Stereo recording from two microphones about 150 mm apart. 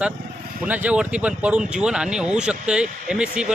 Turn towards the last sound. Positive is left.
turn(degrees=-5)  # may be behind; listen again after turning